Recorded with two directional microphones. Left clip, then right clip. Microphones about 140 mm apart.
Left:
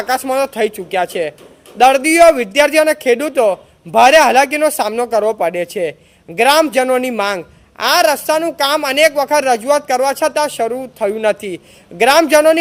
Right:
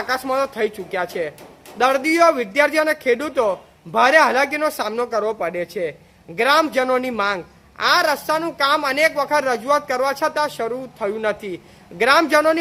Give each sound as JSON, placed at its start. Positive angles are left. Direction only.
{"t": 0.0, "sound": "a man's voice", "side_deg": 25}